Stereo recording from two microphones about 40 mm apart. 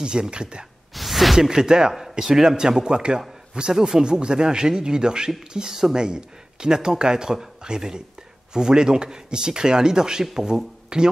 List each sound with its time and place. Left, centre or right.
0.0 s speech: right
0.9 s a sound: centre
1.5 s speech: centre